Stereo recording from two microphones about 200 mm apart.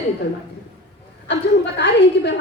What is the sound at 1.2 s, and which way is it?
A woman's voice, 60° left (ahead or behind).